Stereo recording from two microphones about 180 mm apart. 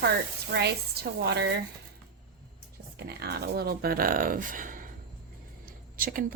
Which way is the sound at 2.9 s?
65° right (ahead or behind).